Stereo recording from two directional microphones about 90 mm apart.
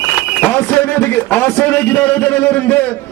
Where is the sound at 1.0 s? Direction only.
25° left (ahead or behind).